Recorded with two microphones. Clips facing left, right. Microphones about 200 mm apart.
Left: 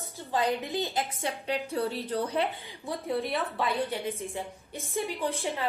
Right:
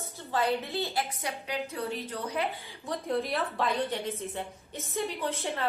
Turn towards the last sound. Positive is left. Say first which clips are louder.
# left 1 dB
turn(degrees=15)  # may be behind; listen again after turning